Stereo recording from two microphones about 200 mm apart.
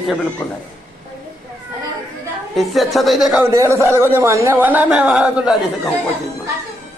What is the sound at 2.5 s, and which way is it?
Speech, centre (ahead or behind).